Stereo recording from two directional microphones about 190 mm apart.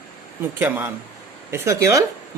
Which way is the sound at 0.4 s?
10° right (ahead or behind).